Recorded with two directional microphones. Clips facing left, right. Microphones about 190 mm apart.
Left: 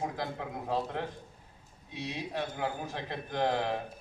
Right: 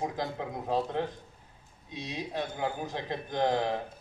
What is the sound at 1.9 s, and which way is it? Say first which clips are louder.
A man's voice: right 1 dB; 15° right (ahead or behind).